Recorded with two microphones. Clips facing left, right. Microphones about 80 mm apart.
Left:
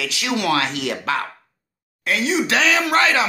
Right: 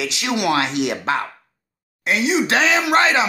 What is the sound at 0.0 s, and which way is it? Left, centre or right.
Speech, right.